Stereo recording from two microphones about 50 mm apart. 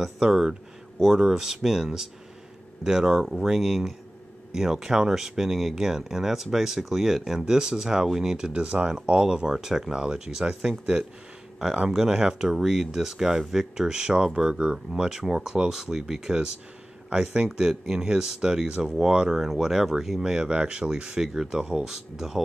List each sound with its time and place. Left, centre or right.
0.0 s speech: centre
11.9 s speech: centre
20.4 s speech: centre